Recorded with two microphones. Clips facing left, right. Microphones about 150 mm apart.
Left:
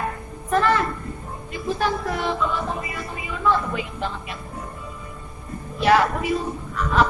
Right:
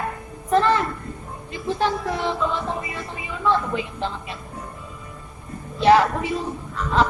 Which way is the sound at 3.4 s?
25° right (ahead or behind).